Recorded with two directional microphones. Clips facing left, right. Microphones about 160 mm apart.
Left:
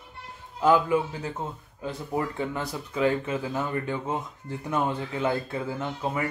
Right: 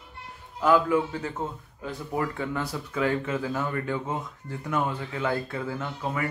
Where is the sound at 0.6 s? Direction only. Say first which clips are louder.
Even; 20° left (ahead or behind).